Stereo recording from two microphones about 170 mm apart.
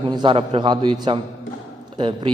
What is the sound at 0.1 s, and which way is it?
A man's voice, 30° right (ahead or behind).